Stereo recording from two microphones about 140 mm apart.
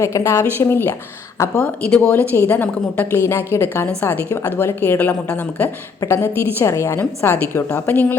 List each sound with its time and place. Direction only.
0.0 s a woman's voice: 20° left (ahead or behind)